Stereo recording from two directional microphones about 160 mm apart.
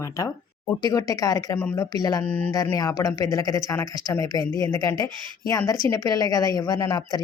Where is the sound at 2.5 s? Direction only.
20° left (ahead or behind).